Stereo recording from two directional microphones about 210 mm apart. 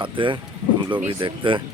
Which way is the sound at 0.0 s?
25° right (ahead or behind).